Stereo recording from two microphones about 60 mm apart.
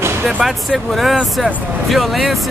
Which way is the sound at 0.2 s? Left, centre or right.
Centre.